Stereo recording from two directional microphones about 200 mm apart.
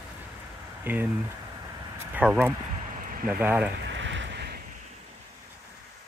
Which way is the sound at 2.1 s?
10° right (ahead or behind).